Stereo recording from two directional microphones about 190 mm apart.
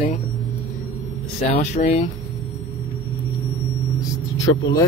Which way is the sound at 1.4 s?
35° left (ahead or behind).